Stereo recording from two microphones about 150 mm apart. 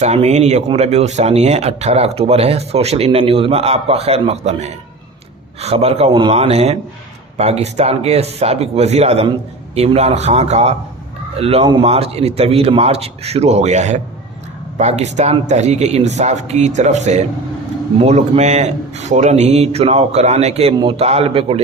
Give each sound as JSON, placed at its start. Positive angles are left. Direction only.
{"t": 0.0, "sound": "a man's voice", "side_deg": -45}